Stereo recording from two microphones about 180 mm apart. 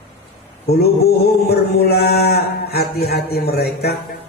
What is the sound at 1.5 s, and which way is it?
Speech, 60° left (ahead or behind).